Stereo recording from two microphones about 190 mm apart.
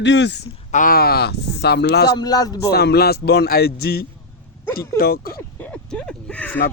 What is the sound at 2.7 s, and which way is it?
Speech, 60° left (ahead or behind).